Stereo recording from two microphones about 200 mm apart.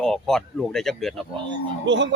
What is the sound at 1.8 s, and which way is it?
Speech, 65° right (ahead or behind).